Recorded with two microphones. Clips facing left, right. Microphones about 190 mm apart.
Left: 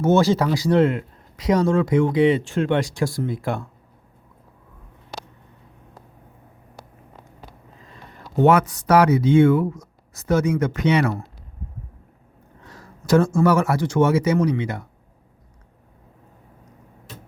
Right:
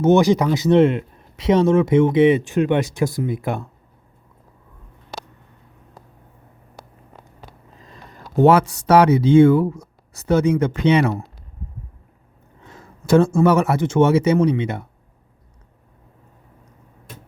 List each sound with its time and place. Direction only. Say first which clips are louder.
0.0 s speech: right 3 dB; 15° right (ahead or behind)
8.4 s speech: right 2 dB; 30° right (ahead or behind)
12.6 s speech: right 2 dB; 25° right (ahead or behind)